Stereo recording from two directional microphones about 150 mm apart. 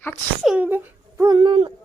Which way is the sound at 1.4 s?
35° right (ahead or behind).